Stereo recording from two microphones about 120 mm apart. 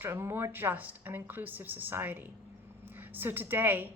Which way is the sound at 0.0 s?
20° right (ahead or behind).